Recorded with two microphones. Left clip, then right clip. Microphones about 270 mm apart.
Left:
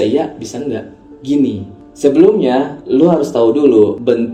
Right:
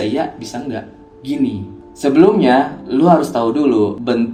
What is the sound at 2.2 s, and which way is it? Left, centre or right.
Speech, right.